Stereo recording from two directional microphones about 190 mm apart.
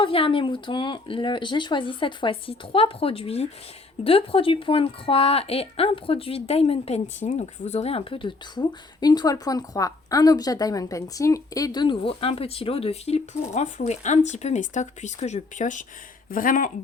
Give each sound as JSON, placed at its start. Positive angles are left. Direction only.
{"t": 0.0, "sound": "speech", "side_deg": 30}